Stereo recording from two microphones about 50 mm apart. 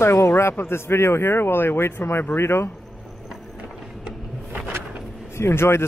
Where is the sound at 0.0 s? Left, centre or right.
Left.